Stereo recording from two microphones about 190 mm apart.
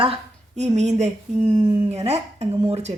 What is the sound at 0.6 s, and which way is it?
Speech, 35° right (ahead or behind).